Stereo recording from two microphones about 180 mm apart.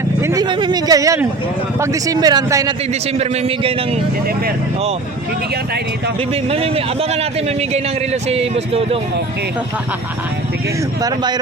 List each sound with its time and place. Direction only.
0.2 s speech: 15° right (ahead or behind)
0.4 s speech: 25° right (ahead or behind)
3.2 s a man's voice: 35° right (ahead or behind)
6.3 s a man's voice: 35° right (ahead or behind)
11.0 s speech: 25° right (ahead or behind)